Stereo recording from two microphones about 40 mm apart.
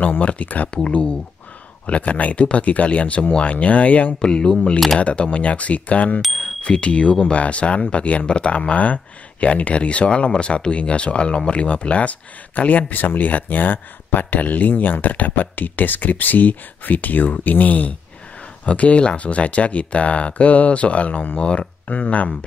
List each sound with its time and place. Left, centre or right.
0.2 s speech: left
0.8 s speech: left
4.2 s speech: left
6.4 s speech: left
18.7 s speech: left
21.8 s speech: left